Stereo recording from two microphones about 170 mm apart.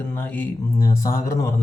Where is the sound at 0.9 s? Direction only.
20° left (ahead or behind).